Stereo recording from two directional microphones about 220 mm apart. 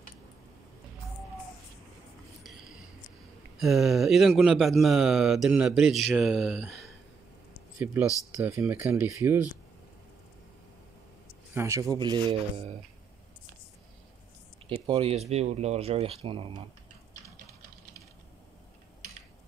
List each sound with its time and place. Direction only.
3.5 s speech: centre (ahead or behind)
11.5 s speech: 15° right (ahead or behind)
14.9 s speech: 25° right (ahead or behind)